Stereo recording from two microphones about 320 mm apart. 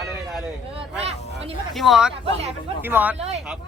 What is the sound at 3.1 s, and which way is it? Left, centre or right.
Speech, centre.